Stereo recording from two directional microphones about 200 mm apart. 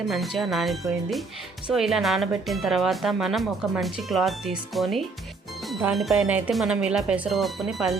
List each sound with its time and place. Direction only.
0.1 s speech: centre (ahead or behind)